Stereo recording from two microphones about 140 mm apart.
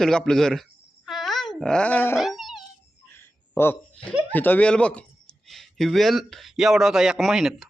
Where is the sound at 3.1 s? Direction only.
15° left (ahead or behind).